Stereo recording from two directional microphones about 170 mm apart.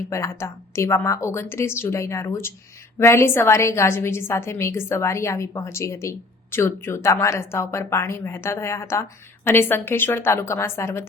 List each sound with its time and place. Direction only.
0.1 s a woman's voice: 15° left (ahead or behind)